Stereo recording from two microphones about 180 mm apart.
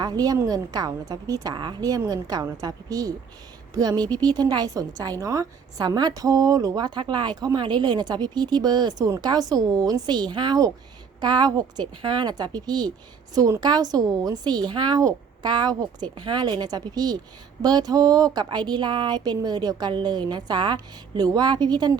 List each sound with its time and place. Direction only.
0.0 s speech: 20° right (ahead or behind)